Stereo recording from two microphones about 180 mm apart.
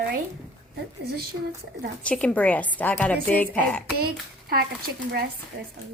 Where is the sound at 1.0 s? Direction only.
60° right (ahead or behind).